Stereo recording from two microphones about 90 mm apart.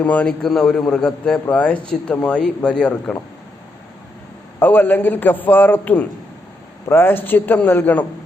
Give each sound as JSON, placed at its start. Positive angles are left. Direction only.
{"t": 0.0, "sound": "a man's voice", "side_deg": 15}
{"t": 4.6, "sound": "a man's voice", "side_deg": 20}